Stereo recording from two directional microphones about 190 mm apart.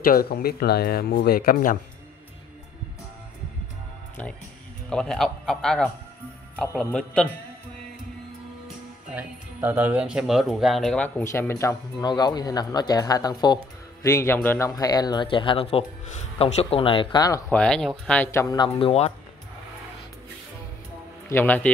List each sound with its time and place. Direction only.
0.0 s speech: 50° left (ahead or behind)
4.2 s a man's voice: 10° left (ahead or behind)
9.1 s speech: 10° right (ahead or behind); by 17.4 s 20° left (ahead or behind)
17.5 s speech: 5° left (ahead or behind); by 19.1 s 30° left (ahead or behind)
21.3 s speech: 10° left (ahead or behind)